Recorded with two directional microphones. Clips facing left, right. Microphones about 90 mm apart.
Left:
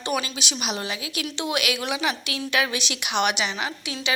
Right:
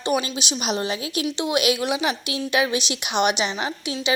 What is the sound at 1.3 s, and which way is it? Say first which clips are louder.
Speech: right 4 dB; 20° right (ahead or behind).